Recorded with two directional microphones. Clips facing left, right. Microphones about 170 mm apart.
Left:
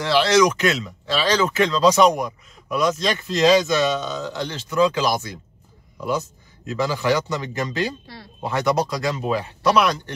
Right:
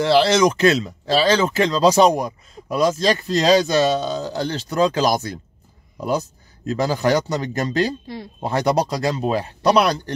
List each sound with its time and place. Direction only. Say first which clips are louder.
0.0 s speech: right 2 dB; 30° right (ahead or behind)